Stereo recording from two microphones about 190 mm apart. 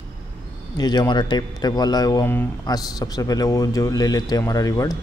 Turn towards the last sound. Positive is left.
turn(degrees=20)  # may be behind; listen again after turning